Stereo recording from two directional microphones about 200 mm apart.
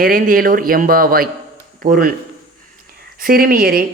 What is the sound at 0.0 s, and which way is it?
A woman's voice, 45° right (ahead or behind).